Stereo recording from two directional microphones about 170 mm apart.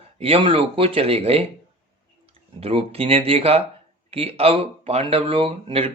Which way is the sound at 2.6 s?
35° right (ahead or behind).